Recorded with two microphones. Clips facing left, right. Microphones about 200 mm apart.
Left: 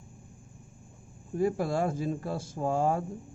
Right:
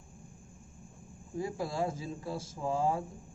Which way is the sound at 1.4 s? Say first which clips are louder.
Left 6 dB; 60° left (ahead or behind).